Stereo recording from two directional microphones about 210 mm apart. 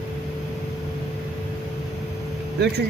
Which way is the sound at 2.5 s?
50° right (ahead or behind).